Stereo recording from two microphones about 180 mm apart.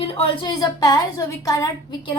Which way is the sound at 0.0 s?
30° left (ahead or behind).